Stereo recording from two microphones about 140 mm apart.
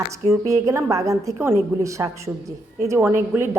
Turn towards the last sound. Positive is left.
turn(degrees=-15)  # may be behind; listen again after turning